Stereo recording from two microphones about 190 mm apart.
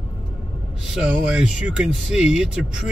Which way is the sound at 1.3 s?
5° right (ahead or behind).